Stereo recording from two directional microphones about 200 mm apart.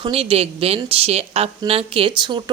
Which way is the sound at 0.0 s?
25° right (ahead or behind).